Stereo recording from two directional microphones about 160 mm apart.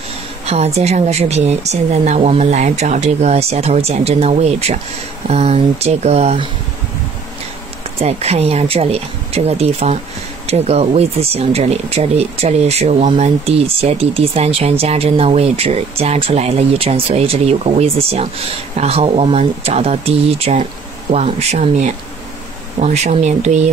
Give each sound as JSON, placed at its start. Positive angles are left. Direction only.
{"t": 0.5, "sound": "a woman's voice", "side_deg": -40}
{"t": 8.0, "sound": "a woman's voice", "side_deg": -40}